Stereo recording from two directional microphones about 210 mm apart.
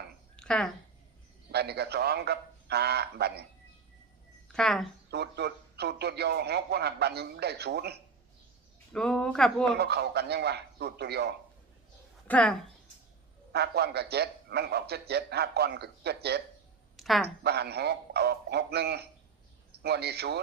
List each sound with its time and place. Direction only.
0.3 s a sound: 5° left (ahead or behind)
1.5 s a man's voice: 50° right (ahead or behind)
4.5 s speech: centre (ahead or behind)
5.1 s a man's voice: 50° right (ahead or behind)
8.9 s speech: 5° left (ahead or behind)
9.7 s a man's voice: 50° right (ahead or behind)
12.3 s speech: 5° left (ahead or behind)
13.5 s a man's voice: 50° right (ahead or behind)
17.0 s a sound: centre (ahead or behind)
17.4 s a man's voice: 50° right (ahead or behind)